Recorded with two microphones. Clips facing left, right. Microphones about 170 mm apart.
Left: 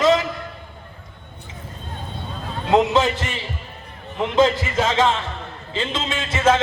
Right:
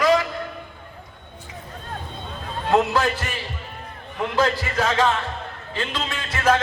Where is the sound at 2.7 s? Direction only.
20° left (ahead or behind).